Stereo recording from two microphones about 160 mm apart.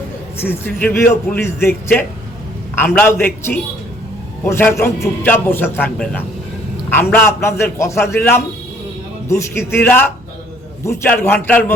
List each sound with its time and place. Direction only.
0.3 s a man's voice: 10° left (ahead or behind)